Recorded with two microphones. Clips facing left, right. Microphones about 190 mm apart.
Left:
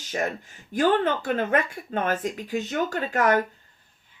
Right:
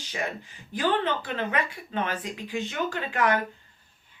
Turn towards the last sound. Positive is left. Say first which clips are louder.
# left 3 dB
turn(degrees=45)  # may be behind; listen again after turning